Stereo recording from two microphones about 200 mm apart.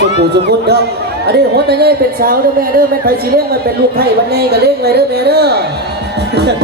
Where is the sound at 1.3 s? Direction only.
55° right (ahead or behind).